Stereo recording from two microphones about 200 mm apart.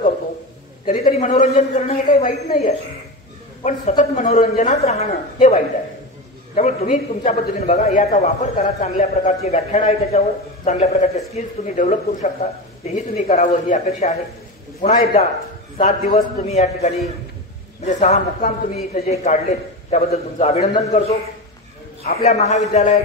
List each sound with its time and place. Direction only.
0.8 s a man's voice: 40° left (ahead or behind)
22.1 s a man's voice: 35° left (ahead or behind)